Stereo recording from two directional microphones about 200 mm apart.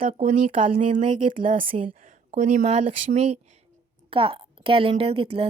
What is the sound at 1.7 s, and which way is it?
A woman's voice, 40° right (ahead or behind).